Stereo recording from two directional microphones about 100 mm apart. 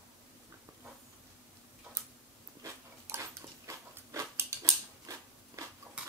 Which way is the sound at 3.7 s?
35° right (ahead or behind).